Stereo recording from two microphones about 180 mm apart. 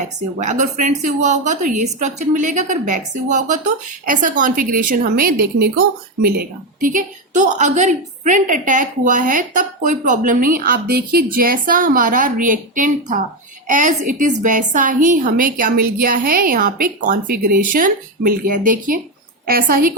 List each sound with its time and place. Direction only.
0.0 s a woman's voice: 45° right (ahead or behind)